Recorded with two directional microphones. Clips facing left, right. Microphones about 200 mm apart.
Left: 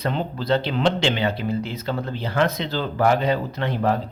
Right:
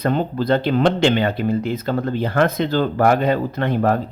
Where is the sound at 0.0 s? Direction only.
50° right (ahead or behind).